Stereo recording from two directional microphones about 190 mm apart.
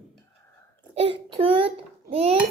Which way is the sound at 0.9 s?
30° right (ahead or behind).